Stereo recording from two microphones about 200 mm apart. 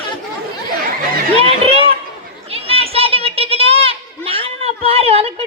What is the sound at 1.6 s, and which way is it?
Chatter, 30° right (ahead or behind).